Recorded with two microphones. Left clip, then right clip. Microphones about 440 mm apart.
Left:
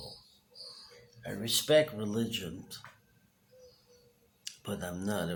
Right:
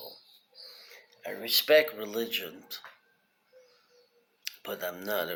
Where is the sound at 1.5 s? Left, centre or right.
Centre.